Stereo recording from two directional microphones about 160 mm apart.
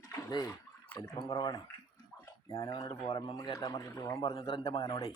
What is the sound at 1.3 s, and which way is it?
A man's voice, 25° left (ahead or behind).